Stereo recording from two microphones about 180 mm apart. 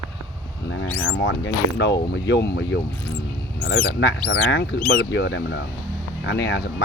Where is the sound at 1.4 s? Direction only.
75° left (ahead or behind).